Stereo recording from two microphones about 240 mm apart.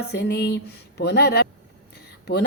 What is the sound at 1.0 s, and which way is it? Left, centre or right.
Speech, left.